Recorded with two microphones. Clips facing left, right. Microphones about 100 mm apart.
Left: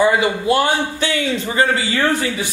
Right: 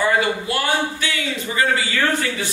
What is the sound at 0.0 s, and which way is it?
Speech, 20° left (ahead or behind).